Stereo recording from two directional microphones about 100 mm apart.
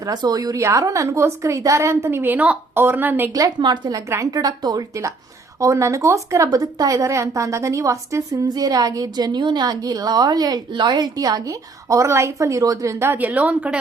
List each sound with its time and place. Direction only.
0.0 s a woman's voice: 40° right (ahead or behind); by 3.3 s 20° right (ahead or behind)
3.6 s a woman's voice: 40° right (ahead or behind); by 13.7 s 10° right (ahead or behind)